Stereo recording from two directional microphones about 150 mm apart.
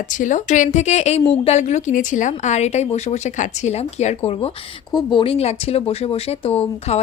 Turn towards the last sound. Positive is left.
turn(degrees=40)  # may be behind; listen again after turning